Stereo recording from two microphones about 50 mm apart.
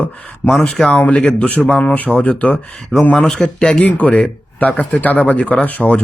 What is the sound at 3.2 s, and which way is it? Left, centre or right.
Speech, centre.